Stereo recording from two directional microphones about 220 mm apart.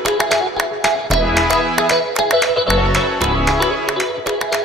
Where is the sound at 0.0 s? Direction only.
Centre (ahead or behind).